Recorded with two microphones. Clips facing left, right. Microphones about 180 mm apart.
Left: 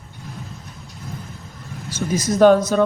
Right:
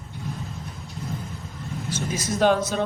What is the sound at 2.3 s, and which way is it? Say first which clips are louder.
Speech: left 8 dB; 50° left (ahead or behind).